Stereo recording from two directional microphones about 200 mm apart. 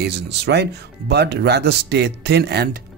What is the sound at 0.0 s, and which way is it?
Speech, 55° right (ahead or behind).